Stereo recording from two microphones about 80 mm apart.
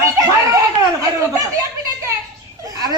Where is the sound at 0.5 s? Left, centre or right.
Right.